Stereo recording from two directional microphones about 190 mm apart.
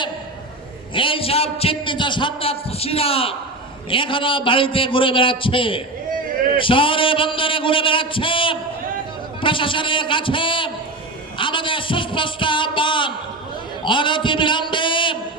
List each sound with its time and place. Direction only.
0.9 s a man's voice: 30° left (ahead or behind)